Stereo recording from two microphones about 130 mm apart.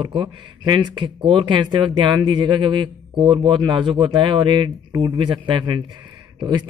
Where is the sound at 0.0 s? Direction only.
35° right (ahead or behind).